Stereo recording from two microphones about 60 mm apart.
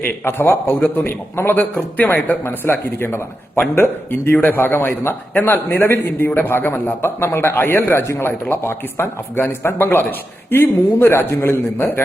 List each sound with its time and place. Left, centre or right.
0.0 s a man's voice: left
11.8 s speech: left